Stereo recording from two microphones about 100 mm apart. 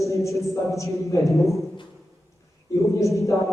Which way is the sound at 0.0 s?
30° left (ahead or behind).